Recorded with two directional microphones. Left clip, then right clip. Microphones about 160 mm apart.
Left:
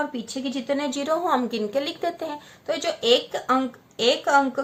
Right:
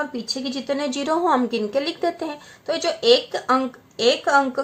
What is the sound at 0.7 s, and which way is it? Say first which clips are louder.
A woman's voice: right 2 dB; 35° right (ahead or behind).